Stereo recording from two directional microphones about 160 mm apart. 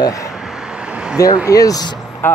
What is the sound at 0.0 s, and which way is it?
Speech, 20° left (ahead or behind).